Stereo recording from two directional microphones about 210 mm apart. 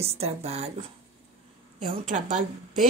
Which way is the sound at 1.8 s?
40° right (ahead or behind).